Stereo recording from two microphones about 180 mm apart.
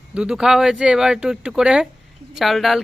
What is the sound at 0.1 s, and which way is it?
Speech, 5° right (ahead or behind).